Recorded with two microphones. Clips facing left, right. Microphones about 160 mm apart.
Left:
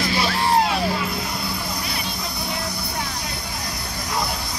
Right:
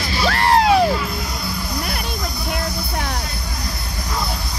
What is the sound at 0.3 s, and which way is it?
Music, 70° right (ahead or behind).